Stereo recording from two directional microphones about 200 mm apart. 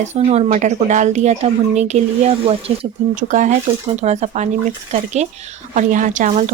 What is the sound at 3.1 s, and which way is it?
Speech, 40° right (ahead or behind).